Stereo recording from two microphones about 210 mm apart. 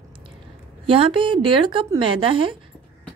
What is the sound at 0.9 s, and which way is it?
Speech, 25° right (ahead or behind).